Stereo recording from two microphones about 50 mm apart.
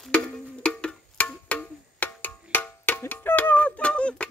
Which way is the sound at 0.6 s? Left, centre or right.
Left.